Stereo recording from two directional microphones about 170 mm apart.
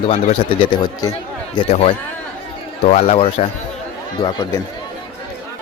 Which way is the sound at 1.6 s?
40° left (ahead or behind).